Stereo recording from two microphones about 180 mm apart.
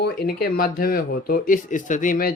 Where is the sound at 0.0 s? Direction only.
60° left (ahead or behind).